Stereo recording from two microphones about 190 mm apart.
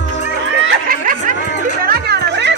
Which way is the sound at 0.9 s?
50° right (ahead or behind).